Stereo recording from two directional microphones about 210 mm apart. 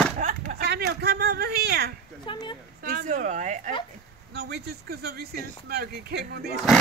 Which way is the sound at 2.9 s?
40° right (ahead or behind).